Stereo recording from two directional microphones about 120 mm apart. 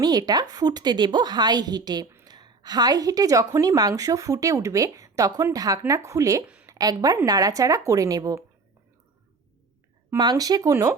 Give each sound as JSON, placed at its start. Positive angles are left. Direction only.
{"t": 0.0, "sound": "a woman's voice", "side_deg": -35}
{"t": 6.4, "sound": "a sound", "side_deg": -10}
{"t": 6.7, "sound": "a woman's voice", "side_deg": -30}
{"t": 10.2, "sound": "a woman's voice", "side_deg": -35}